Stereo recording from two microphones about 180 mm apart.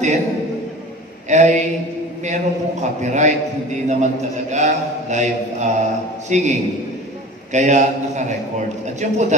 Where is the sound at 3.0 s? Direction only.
40° right (ahead or behind).